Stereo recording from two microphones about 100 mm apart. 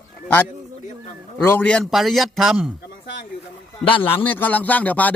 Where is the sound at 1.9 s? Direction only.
Centre (ahead or behind).